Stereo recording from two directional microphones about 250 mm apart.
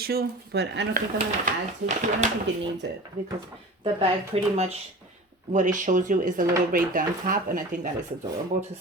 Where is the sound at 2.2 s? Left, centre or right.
Right.